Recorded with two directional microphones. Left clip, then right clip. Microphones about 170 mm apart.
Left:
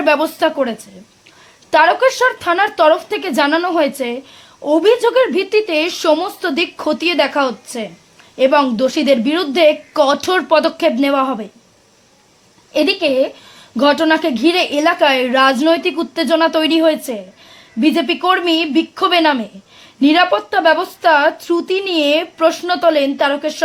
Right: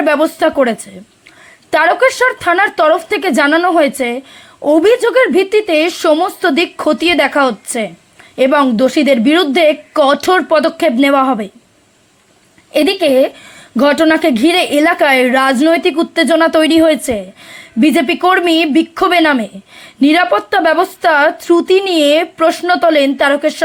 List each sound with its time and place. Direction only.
0.0 s a woman's voice: 15° right (ahead or behind)
12.7 s a woman's voice: 15° right (ahead or behind)